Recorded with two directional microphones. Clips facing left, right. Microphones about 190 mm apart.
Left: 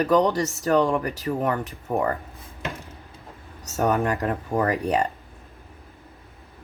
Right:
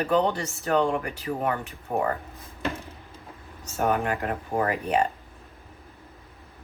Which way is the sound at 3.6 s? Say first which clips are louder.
Left 3 dB; 40° left (ahead or behind).